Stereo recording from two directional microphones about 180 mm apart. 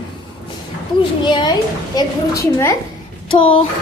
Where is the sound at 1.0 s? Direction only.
25° left (ahead or behind).